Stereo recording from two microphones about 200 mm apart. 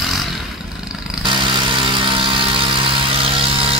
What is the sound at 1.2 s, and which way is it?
Vehicle, 25° right (ahead or behind).